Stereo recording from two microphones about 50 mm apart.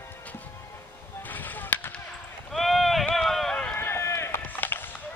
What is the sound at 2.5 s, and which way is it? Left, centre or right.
Clip-clop, centre.